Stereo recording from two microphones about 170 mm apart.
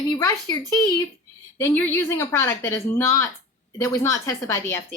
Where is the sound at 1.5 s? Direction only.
10° left (ahead or behind).